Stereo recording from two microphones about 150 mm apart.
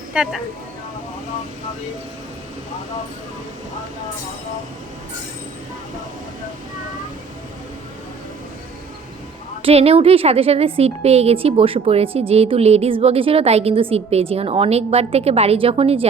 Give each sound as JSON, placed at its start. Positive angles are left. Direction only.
{"t": 0.1, "sound": "speech", "side_deg": -5}
{"t": 9.6, "sound": "a woman's voice", "side_deg": -40}